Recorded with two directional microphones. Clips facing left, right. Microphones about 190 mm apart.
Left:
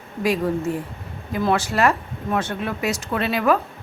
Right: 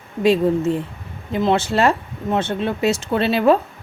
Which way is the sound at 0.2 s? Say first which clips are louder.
Right 5 dB; 25° right (ahead or behind).